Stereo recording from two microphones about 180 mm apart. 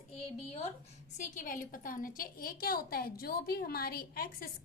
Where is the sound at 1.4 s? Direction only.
50° left (ahead or behind).